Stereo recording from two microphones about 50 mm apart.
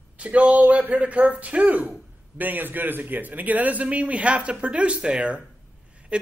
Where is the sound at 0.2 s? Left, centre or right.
Right.